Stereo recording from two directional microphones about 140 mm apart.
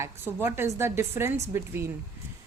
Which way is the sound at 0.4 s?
20° right (ahead or behind).